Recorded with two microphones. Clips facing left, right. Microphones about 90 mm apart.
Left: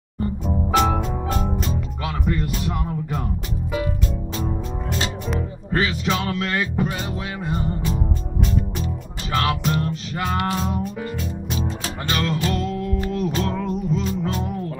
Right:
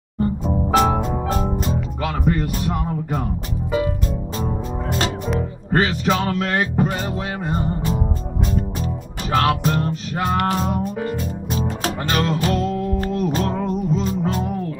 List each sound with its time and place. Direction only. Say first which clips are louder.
0.4 s music: right 1 dB; 30° right (ahead or behind)
1.7 s music: right 4 dB; 50° right (ahead or behind)
2.7 s music: right 3 dB; 40° right (ahead or behind)
5.7 s music: right 3 dB; 45° right (ahead or behind)
9.3 s music: right 3 dB; 40° right (ahead or behind)